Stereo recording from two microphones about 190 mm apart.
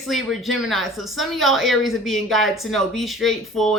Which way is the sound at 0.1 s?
Centre (ahead or behind).